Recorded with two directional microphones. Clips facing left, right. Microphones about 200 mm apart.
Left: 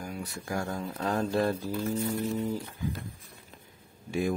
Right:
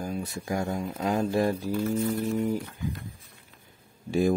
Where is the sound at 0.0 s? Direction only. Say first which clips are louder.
Right 5 dB; 25° right (ahead or behind).